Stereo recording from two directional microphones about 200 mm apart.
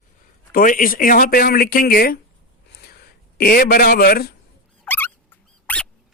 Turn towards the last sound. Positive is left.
turn(degrees=5)  # may be behind; listen again after turning